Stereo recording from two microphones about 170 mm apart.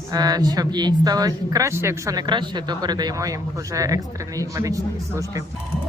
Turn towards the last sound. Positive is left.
turn(degrees=-20)  # may be behind; listen again after turning